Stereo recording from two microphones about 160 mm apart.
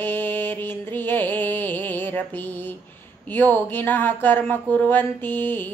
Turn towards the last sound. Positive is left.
turn(degrees=15)  # may be behind; listen again after turning